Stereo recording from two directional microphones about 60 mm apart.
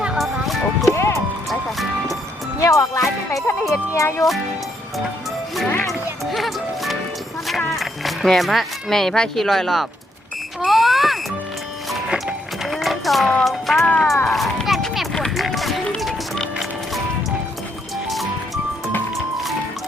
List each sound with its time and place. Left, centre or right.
0.2 s music: centre
0.9 s music: left
1.5 s music: centre
2.6 s speech: left
5.9 s music: centre
7.7 s speech: centre
10.7 s smoke detector: centre
12.6 s music: centre
13.8 s speech: left
14.3 s a sound: centre
15.4 s run: centre
16.0 s music: centre
18.1 s music: centre